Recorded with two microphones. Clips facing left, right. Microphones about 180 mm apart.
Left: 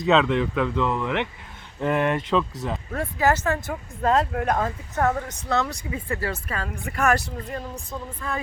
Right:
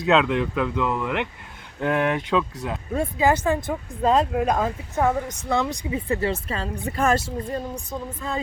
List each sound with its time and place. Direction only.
0.0 s speech: centre (ahead or behind)
2.9 s speech: 15° right (ahead or behind)